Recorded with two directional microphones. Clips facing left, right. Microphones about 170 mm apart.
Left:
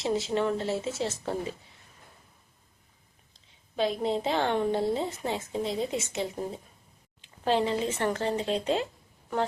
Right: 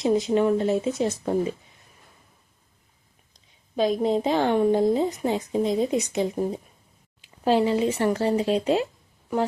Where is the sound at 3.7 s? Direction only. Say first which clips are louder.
Right 6 dB; 20° right (ahead or behind).